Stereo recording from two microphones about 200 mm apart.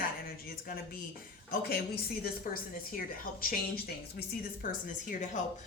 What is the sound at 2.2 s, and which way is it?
A woman's voice, 45° left (ahead or behind).